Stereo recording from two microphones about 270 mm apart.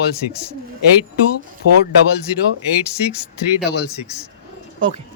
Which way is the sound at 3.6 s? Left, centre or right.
Left.